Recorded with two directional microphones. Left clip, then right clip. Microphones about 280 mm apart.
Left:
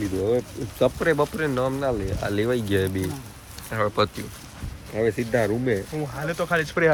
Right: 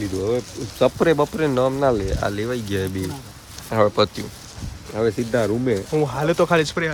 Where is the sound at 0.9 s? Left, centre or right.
Centre.